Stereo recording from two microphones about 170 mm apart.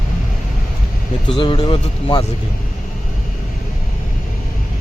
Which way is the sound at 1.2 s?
30° left (ahead or behind).